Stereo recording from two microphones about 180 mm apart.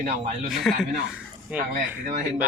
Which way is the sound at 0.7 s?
Centre (ahead or behind).